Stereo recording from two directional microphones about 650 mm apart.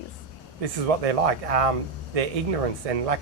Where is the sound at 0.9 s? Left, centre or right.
Right.